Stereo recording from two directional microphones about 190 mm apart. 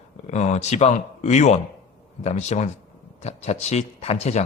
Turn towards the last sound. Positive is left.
turn(degrees=35)  # may be behind; listen again after turning